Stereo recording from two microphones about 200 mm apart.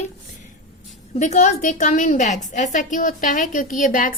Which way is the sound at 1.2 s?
35° left (ahead or behind).